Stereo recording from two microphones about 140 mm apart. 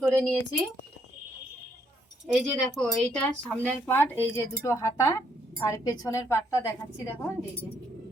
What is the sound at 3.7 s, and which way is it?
Speech, 15° left (ahead or behind).